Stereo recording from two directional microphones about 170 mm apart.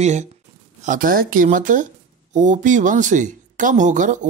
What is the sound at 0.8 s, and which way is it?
Speech, 55° right (ahead or behind).